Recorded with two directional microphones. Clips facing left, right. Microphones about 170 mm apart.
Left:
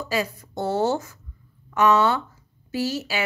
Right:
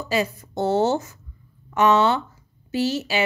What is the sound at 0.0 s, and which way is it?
A woman's voice, 25° right (ahead or behind).